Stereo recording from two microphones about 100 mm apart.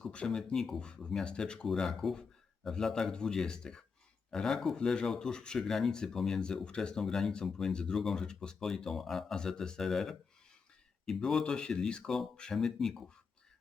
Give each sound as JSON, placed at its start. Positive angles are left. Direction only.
{"t": 0.0, "sound": "speech", "side_deg": 10}